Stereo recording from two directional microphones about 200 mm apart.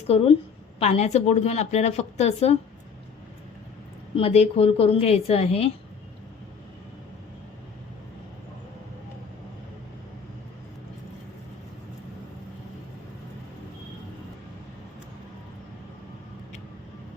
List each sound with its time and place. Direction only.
0.1 s a woman's voice: 30° left (ahead or behind)
4.1 s a woman's voice: 30° left (ahead or behind)